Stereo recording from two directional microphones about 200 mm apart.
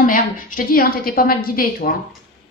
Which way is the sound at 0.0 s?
45° left (ahead or behind).